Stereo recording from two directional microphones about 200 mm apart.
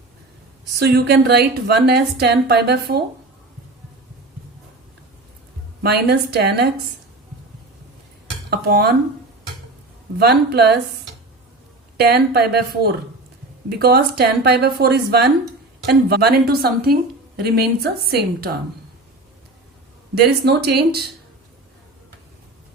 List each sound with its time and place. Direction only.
0.8 s a woman's voice: 55° right (ahead or behind)
5.8 s a woman's voice: 55° right (ahead or behind)
8.4 s a woman's voice: 50° right (ahead or behind)
10.2 s a woman's voice: 55° right (ahead or behind)
11.9 s a woman's voice: 50° right (ahead or behind)
20.1 s a woman's voice: 55° right (ahead or behind)